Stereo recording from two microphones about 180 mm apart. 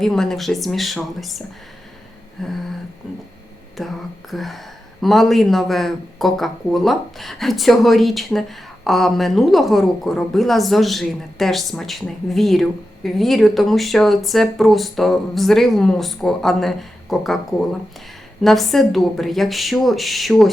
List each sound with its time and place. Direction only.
0.0 s speech: centre (ahead or behind)
2.4 s speech: centre (ahead or behind)
3.8 s speech: centre (ahead or behind)